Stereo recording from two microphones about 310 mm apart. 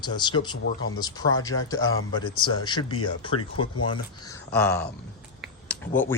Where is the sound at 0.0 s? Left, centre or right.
Centre.